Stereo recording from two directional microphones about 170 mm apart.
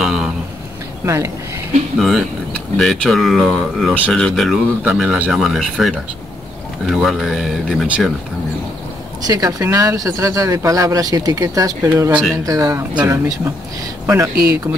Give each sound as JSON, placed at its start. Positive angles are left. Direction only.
{"t": 0.0, "sound": "speech", "side_deg": -5}
{"t": 1.0, "sound": "speech", "side_deg": -20}
{"t": 2.0, "sound": "speech", "side_deg": 0}
{"t": 9.2, "sound": "speech", "side_deg": -20}
{"t": 14.0, "sound": "speech", "side_deg": -20}